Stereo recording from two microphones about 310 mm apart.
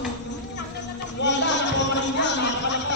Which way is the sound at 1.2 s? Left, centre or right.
Left.